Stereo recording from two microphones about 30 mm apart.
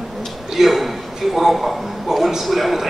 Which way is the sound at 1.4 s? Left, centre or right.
Centre.